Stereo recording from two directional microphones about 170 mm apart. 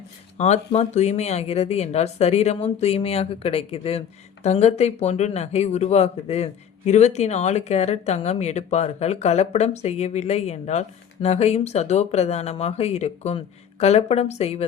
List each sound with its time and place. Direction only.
0.3 s speech: 40° left (ahead or behind)